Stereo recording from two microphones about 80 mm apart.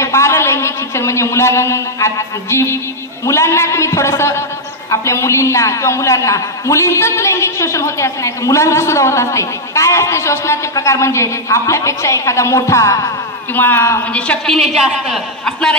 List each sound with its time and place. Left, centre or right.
0.0 s a man's voice: left
13.6 s a man's voice: left
14.1 s a woman's voice: centre
14.5 s a woman's voice: centre